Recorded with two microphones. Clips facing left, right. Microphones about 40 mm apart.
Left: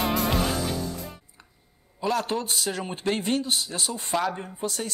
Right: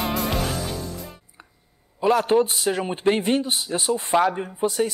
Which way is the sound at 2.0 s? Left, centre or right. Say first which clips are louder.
Right 8 dB; right.